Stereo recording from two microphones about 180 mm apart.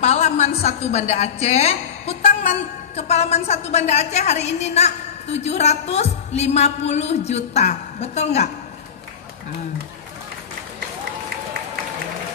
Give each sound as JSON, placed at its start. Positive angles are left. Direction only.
{"t": 0.0, "sound": "a woman's voice", "side_deg": 40}